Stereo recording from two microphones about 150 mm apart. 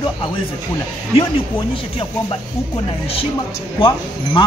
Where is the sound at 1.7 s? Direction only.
35° left (ahead or behind).